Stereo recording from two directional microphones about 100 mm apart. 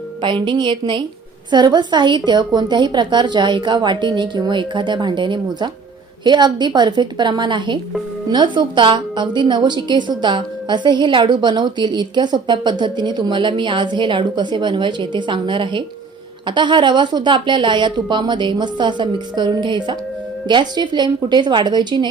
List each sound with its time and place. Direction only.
0.2 s a woman's voice: 50° right (ahead or behind)